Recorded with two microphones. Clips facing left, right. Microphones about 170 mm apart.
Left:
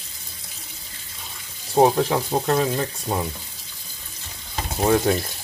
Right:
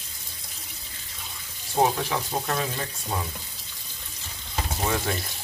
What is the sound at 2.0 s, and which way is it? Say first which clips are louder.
Speech: left 7 dB; 35° left (ahead or behind).